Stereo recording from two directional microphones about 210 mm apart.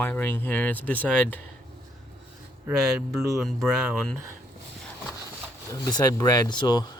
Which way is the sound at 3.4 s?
Centre (ahead or behind).